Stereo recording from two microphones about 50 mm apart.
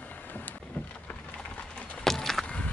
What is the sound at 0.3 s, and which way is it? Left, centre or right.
Vehicle, left.